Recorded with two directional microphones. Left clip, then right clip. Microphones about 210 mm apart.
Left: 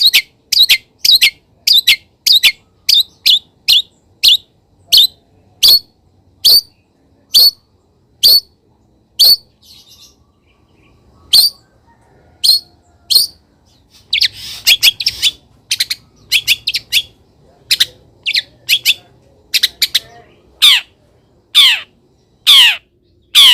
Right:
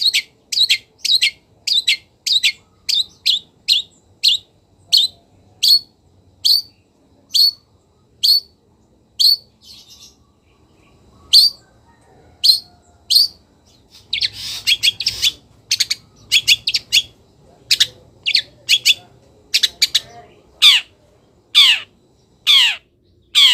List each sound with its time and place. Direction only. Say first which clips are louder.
0.0 s bird: left 7 dB; 20° left (ahead or behind)
5.5 s a sound: left 5 dB; 20° left (ahead or behind)
7.3 s whistle: left 6 dB; 25° left (ahead or behind)
11.3 s bird: left 1 dB; 25° left (ahead or behind)
20.6 s squawk: left 2 dB; 20° left (ahead or behind)
22.4 s crow: left 6 dB; 20° left (ahead or behind)
23.3 s squawk: left 5 dB; 20° left (ahead or behind)